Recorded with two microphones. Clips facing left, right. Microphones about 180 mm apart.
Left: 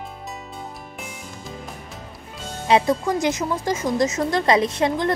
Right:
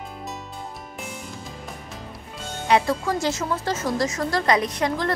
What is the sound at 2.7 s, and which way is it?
A woman's voice, 20° left (ahead or behind).